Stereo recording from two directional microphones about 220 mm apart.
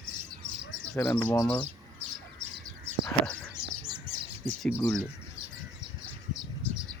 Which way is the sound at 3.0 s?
5° left (ahead or behind).